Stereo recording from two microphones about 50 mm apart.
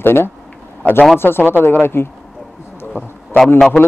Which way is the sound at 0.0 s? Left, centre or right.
Left.